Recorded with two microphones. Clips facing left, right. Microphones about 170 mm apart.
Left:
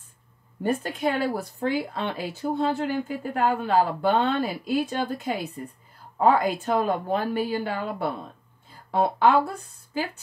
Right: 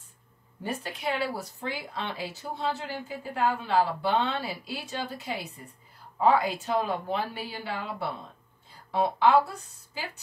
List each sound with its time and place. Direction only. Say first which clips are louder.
0.7 s speech: left 7 dB; 50° left (ahead or behind)